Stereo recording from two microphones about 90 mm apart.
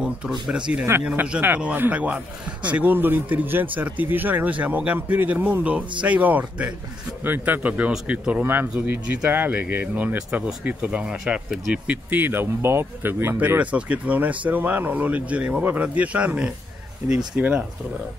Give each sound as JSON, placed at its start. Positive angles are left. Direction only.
{"t": 0.0, "sound": "speech", "side_deg": -10}